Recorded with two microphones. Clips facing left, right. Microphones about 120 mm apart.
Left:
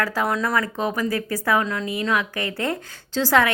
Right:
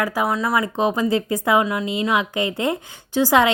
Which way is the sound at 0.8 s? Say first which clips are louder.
Right 4 dB; 20° right (ahead or behind).